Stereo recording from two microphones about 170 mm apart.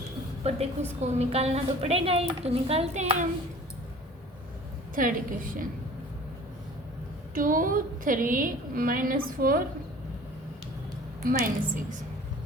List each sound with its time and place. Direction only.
0.4 s a woman's voice: 40° right (ahead or behind)
4.9 s a woman's voice: 55° right (ahead or behind)
7.3 s a woman's voice: 55° right (ahead or behind)
11.3 s a woman's voice: 55° right (ahead or behind)